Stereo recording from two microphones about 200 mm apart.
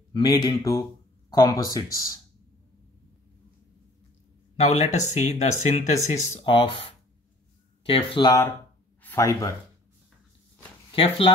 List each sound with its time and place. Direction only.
0.1 s speech: 20° left (ahead or behind)
4.6 s speech: 35° left (ahead or behind)
9.0 s a sound: 15° left (ahead or behind)
10.9 s speech: 25° left (ahead or behind)